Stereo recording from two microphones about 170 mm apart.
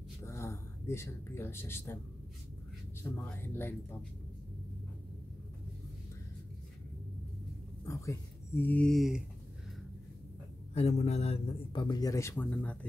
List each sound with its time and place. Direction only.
0.2 s speech: 15° left (ahead or behind)
3.0 s speech: 10° left (ahead or behind)
7.8 s speech: 20° left (ahead or behind); by 9.2 s centre (ahead or behind)
10.7 s a man's voice: 40° left (ahead or behind)
11.8 s speech: 20° left (ahead or behind)